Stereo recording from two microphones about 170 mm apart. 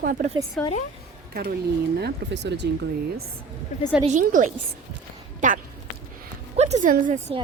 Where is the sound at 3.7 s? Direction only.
45° left (ahead or behind).